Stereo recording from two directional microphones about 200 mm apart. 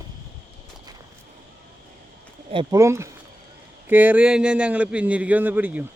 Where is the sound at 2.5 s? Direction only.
15° right (ahead or behind).